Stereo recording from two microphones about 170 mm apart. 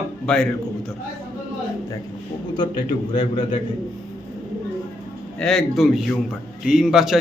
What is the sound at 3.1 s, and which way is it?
Speech, 30° left (ahead or behind).